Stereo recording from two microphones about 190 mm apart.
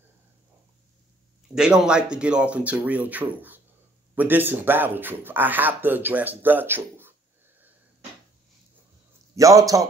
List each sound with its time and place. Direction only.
1.5 s speech: 5° right (ahead or behind)
9.3 s speech: 15° right (ahead or behind)